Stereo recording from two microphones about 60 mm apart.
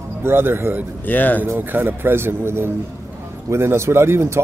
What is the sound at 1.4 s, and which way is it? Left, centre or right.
Speech, right.